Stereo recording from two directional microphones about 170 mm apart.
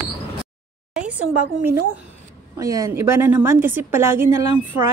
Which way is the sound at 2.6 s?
20° right (ahead or behind).